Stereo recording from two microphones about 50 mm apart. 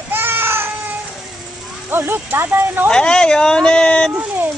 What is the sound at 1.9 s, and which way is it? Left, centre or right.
Speech, right.